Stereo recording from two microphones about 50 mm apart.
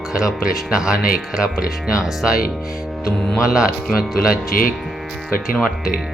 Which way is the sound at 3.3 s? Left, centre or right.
Centre.